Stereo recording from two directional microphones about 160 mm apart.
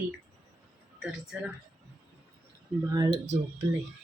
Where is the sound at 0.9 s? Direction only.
5° right (ahead or behind).